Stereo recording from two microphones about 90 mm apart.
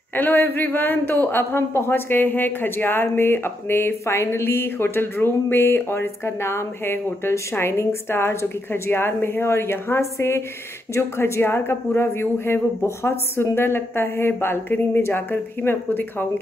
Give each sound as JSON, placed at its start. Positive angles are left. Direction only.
{"t": 0.1, "sound": "speech", "side_deg": 20}